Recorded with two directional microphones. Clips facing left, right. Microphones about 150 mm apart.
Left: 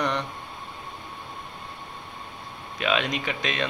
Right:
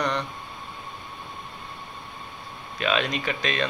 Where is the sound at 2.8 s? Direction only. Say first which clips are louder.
Even; 15° left (ahead or behind).